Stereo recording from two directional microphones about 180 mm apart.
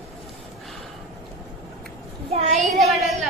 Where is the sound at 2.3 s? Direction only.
35° right (ahead or behind).